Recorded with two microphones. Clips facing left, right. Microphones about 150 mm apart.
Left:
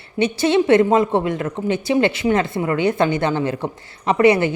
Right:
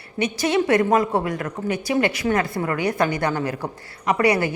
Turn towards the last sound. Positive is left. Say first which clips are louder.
# left 5 dB
turn(degrees=25)  # may be behind; listen again after turning